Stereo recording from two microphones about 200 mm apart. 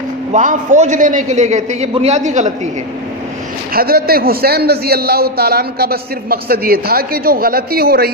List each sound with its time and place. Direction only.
0.3 s a man's voice: 40° right (ahead or behind)
3.7 s a man's voice: 50° right (ahead or behind)